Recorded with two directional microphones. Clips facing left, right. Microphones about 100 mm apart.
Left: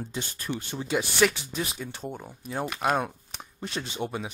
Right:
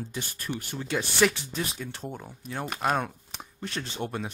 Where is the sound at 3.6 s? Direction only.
15° left (ahead or behind).